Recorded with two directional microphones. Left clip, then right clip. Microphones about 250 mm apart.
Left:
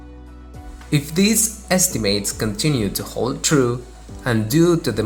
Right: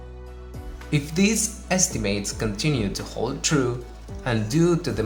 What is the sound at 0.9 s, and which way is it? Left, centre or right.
A woman's voice, centre.